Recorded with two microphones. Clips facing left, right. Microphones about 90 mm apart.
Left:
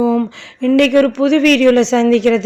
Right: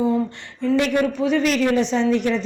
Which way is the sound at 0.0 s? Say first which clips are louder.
Left 6 dB; 90° left.